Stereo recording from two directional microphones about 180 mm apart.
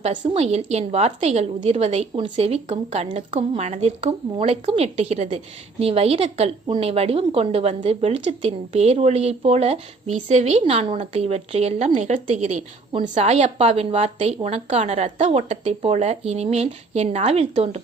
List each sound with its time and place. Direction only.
0.0 s a woman's voice: 40° right (ahead or behind)